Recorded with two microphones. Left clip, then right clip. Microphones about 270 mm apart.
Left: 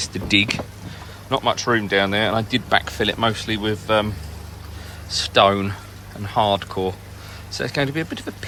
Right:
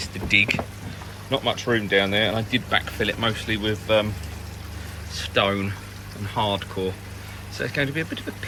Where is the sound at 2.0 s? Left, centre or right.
Left.